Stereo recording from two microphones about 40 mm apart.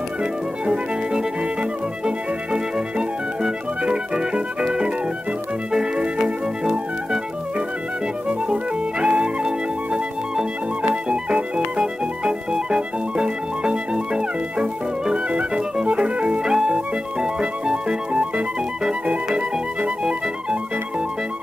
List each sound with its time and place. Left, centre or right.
0.2 s music: right
5.7 s organ: centre
9.0 s music: right
19.8 s music: right